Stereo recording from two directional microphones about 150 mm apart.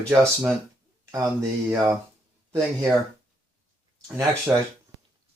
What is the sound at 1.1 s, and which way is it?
Speech, 20° right (ahead or behind).